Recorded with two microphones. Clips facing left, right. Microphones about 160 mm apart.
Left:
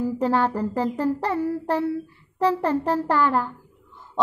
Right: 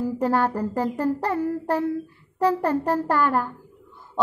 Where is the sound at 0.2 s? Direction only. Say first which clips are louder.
Even; 45° right (ahead or behind).